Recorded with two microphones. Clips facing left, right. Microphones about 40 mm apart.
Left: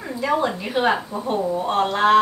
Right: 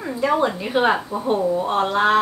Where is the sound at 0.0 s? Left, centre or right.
Centre.